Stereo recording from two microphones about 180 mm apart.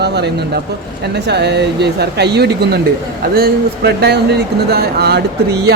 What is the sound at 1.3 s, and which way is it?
A woman's voice, 70° right (ahead or behind).